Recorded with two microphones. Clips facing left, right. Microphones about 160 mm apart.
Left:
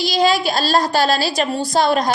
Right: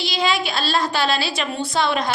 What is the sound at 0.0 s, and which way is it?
A woman's voice, 40° left (ahead or behind).